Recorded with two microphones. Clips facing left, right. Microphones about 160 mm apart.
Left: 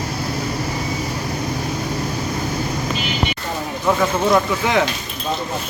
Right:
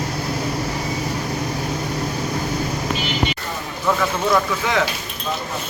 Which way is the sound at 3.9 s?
20° left (ahead or behind).